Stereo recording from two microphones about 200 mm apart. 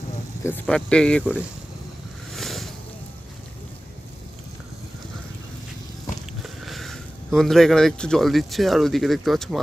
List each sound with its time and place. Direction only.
0.4 s speech: 5° left (ahead or behind)
1.2 s speech: 5° right (ahead or behind)
2.3 s vehicle: centre (ahead or behind)
6.4 s speech: centre (ahead or behind)